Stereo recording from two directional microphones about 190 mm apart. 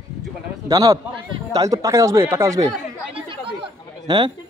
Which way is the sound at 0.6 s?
20° right (ahead or behind).